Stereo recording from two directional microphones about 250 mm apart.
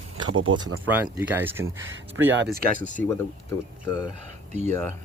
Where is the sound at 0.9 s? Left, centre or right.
Centre.